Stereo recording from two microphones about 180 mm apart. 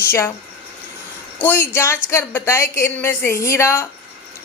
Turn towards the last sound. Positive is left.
turn(degrees=15)  # may be behind; listen again after turning